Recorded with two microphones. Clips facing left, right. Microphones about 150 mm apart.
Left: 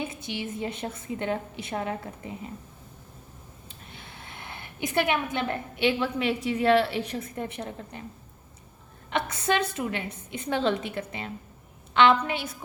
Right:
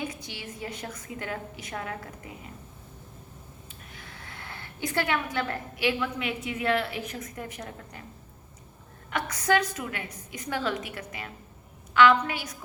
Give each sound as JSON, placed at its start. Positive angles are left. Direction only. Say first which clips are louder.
{"t": 0.0, "sound": "a woman's voice", "louder": "left 4 dB", "side_deg": 25}
{"t": 3.7, "sound": "a woman's voice", "louder": "left 3 dB", "side_deg": 25}
{"t": 9.0, "sound": "a woman's voice", "louder": "even", "side_deg": 25}